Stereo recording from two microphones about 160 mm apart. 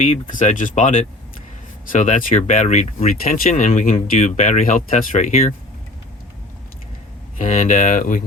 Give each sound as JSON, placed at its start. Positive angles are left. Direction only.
{"t": 0.0, "sound": "speech", "side_deg": 50}
{"t": 7.3, "sound": "speech", "side_deg": 55}